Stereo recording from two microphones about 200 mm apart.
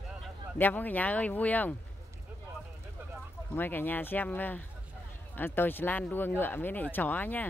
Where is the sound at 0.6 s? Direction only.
10° left (ahead or behind).